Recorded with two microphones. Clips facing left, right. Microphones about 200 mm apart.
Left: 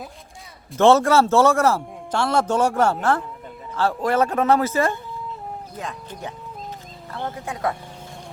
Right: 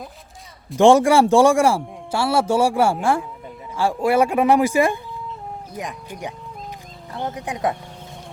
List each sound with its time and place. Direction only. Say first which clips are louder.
0.8 s speech: right 2 dB; 15° right (ahead or behind)